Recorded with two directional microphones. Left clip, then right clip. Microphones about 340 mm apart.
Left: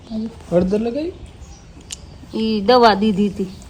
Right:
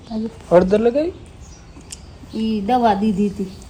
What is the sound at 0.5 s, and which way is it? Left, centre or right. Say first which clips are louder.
Speech: right 5 dB; right.